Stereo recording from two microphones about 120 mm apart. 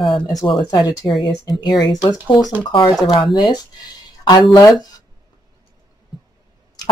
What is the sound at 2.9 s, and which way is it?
Speech, centre (ahead or behind).